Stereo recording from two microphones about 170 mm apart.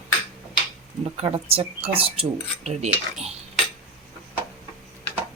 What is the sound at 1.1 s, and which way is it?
Speech, 35° right (ahead or behind).